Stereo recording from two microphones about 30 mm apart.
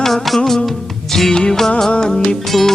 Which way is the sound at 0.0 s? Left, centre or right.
Centre.